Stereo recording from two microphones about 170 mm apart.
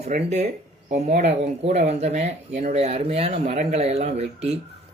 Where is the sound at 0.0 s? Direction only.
45° right (ahead or behind).